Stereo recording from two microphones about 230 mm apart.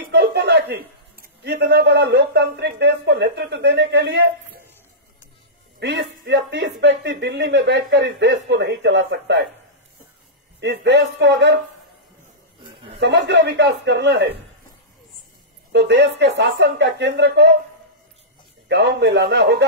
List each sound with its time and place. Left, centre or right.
0.1 s a man's voice: right
5.8 s speech: right
10.6 s speech: right
13.0 s speech: right
15.7 s speech: right
18.7 s speech: right